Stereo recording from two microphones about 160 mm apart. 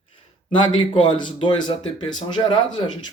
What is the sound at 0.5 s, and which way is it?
Speech, 30° left (ahead or behind).